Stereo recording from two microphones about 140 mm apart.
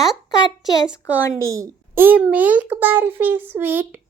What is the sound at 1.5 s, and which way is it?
A child's voice, 15° right (ahead or behind).